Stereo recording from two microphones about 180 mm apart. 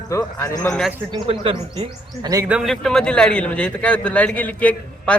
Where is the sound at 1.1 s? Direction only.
30° right (ahead or behind).